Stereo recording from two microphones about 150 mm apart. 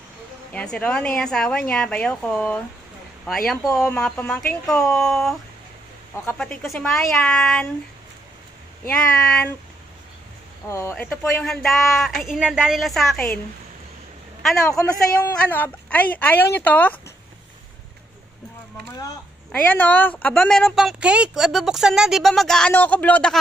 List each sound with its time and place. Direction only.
0.5 s speech: 10° left (ahead or behind)
6.3 s speech: 5° left (ahead or behind)
8.8 s speech: 10° left (ahead or behind)
10.7 s speech: 20° left (ahead or behind)
11.1 s speech: centre (ahead or behind)
15.0 s speech: 10° left (ahead or behind)
19.5 s speech: 10° left (ahead or behind)